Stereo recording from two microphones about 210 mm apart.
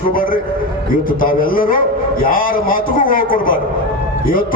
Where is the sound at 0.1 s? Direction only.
40° left (ahead or behind).